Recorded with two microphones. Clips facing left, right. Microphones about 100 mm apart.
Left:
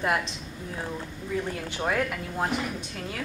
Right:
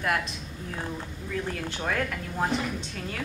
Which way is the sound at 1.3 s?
15° left (ahead or behind).